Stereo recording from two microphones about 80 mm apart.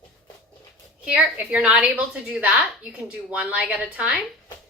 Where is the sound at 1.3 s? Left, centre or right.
Centre.